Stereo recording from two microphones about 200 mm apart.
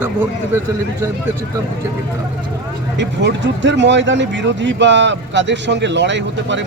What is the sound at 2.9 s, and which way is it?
Speech, 60° right (ahead or behind).